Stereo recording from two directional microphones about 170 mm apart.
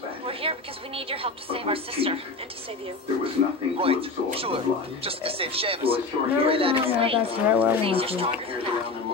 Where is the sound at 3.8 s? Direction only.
35° right (ahead or behind).